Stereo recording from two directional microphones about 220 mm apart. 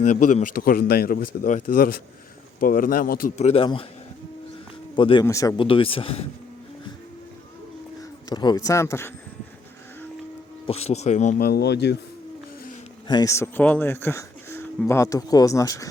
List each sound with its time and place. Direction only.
0.0 s a man's voice: 35° left (ahead or behind)
4.9 s speech: 20° left (ahead or behind)
8.3 s speech: 20° left (ahead or behind)
10.7 s a man's voice: 30° left (ahead or behind); by 11.9 s 50° left (ahead or behind)
13.1 s speech: 15° left (ahead or behind)